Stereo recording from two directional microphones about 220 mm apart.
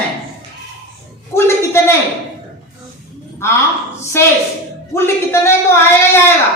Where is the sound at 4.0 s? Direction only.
10° left (ahead or behind).